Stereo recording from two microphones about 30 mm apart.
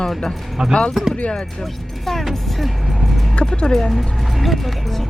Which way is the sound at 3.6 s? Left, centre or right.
Centre.